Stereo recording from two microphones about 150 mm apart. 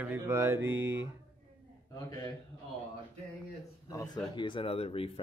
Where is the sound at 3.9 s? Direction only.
25° left (ahead or behind).